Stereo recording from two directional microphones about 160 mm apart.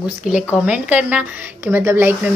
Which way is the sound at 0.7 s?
10° right (ahead or behind).